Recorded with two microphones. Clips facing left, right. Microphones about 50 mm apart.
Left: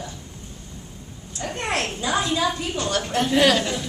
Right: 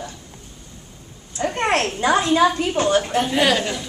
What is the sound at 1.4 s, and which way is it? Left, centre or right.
A child's voice, right.